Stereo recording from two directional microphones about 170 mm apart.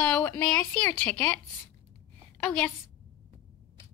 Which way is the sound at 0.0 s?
15° left (ahead or behind).